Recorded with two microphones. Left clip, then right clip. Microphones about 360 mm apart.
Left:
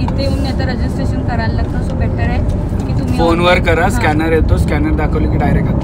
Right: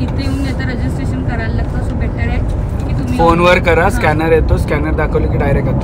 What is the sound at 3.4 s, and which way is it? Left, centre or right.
Speech, centre.